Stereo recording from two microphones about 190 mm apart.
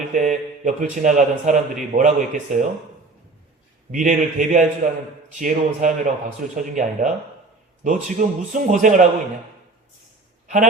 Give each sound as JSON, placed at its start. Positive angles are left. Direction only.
{"t": 0.1, "sound": "a man's voice", "side_deg": -40}
{"t": 3.9, "sound": "a man's voice", "side_deg": -45}